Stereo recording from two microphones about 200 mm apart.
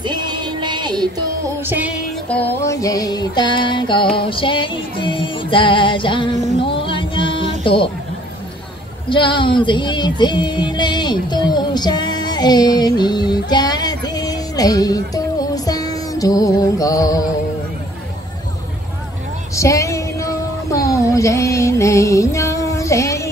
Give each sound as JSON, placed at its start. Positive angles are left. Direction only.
{"t": 0.0, "sound": "music", "side_deg": -20}
{"t": 1.6, "sound": "music", "side_deg": -10}
{"t": 2.2, "sound": "music", "side_deg": 5}
{"t": 9.1, "sound": "speech", "side_deg": 25}
{"t": 19.5, "sound": "a sound", "side_deg": 15}